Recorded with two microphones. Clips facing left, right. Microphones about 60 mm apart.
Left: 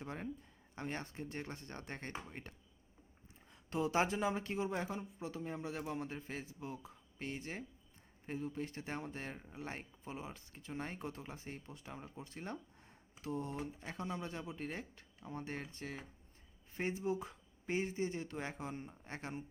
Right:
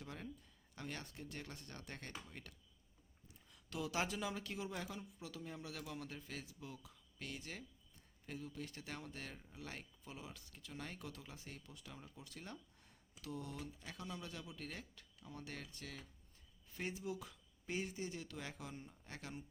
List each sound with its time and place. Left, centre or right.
0.0 s speech: left